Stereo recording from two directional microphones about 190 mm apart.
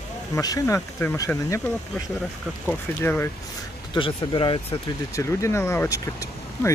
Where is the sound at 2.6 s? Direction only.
10° left (ahead or behind).